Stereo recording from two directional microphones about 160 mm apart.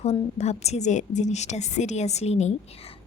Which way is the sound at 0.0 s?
40° left (ahead or behind).